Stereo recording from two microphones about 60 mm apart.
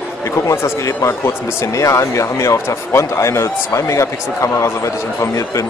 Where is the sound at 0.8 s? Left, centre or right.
Left.